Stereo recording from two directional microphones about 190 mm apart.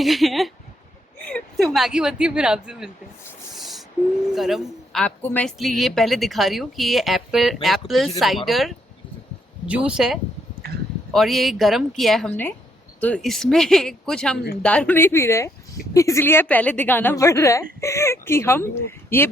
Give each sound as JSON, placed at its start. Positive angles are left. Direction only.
{"t": 0.0, "sound": "speech", "side_deg": 0}
{"t": 3.5, "sound": "a sound", "side_deg": 0}
{"t": 4.4, "sound": "a woman's voice", "side_deg": 0}